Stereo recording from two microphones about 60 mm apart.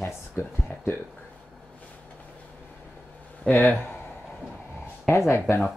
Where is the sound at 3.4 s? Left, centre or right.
Centre.